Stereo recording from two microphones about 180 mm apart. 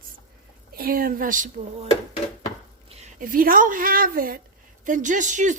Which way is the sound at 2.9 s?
40° right (ahead or behind).